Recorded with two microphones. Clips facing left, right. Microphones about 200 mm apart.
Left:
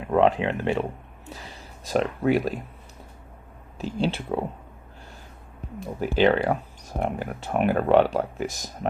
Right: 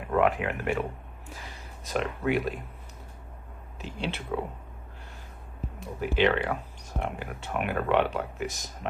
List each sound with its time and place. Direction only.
0.1 s speech: 30° left (ahead or behind)
3.8 s speech: 35° left (ahead or behind)
6.0 s speech: 35° left (ahead or behind)